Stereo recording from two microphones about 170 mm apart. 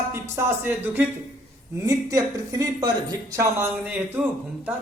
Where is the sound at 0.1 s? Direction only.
15° right (ahead or behind).